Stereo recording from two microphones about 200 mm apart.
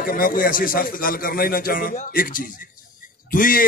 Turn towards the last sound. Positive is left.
turn(degrees=45)  # may be behind; listen again after turning